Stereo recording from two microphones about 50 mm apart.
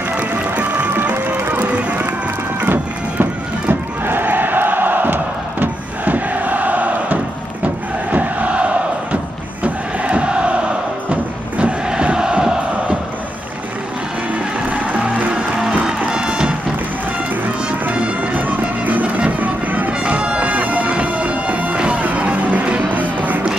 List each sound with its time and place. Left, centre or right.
1.1 s music: right
1.7 s run: right
2.6 s music: right
7.6 s crowd: right
14.7 s music: right
16.1 s music: centre
17.6 s music: right
19.9 s music: right